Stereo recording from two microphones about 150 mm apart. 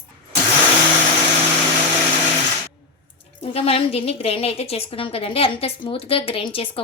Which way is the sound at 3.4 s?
40° left (ahead or behind).